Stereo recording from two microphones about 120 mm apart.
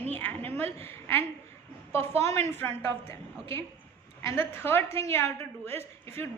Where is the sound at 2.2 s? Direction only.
20° left (ahead or behind).